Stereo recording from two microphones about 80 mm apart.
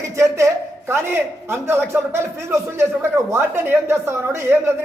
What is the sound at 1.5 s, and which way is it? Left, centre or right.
Speech, right.